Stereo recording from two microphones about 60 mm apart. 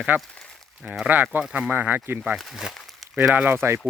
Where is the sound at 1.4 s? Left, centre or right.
Centre.